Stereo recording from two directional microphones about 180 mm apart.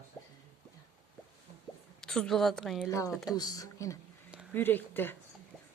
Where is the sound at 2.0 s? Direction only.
5° left (ahead or behind).